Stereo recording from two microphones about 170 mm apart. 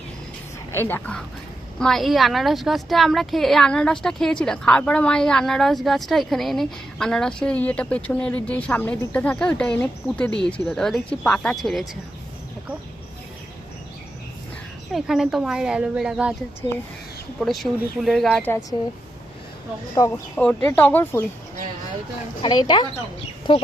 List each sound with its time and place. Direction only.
0.7 s speech: 15° left (ahead or behind)
14.9 s speech: centre (ahead or behind)
17.4 s speech: centre (ahead or behind)
20.0 s speech: 15° left (ahead or behind)
22.4 s speech: 25° left (ahead or behind)